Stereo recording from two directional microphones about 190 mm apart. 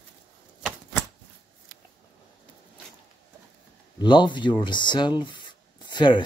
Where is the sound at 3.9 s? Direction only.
25° left (ahead or behind).